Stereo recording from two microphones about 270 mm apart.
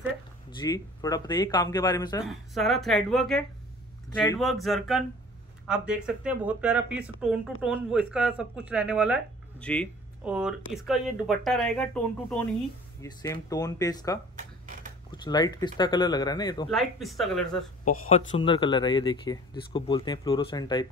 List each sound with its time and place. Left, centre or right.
0.6 s speech: centre
2.2 s speech: centre
4.4 s speech: centre
16.7 s speech: centre
17.8 s speech: left